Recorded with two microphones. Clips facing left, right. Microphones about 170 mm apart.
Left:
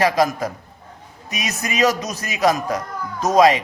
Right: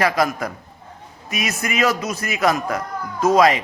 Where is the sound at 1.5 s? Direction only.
20° left (ahead or behind).